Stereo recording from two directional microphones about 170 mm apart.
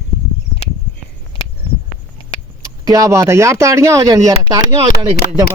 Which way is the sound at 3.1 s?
15° right (ahead or behind).